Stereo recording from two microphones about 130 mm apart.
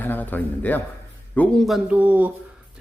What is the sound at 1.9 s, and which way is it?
Speech, 15° right (ahead or behind).